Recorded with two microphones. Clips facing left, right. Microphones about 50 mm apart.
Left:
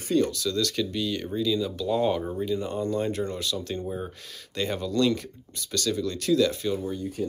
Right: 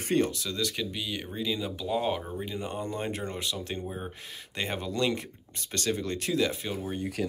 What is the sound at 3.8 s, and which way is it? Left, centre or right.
Speech, centre.